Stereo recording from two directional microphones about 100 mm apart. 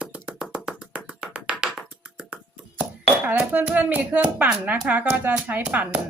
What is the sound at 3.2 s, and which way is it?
Speech, 15° right (ahead or behind).